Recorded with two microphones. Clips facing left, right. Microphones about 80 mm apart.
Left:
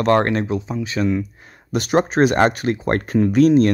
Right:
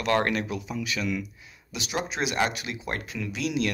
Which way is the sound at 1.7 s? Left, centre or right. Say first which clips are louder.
Left 13 dB; left.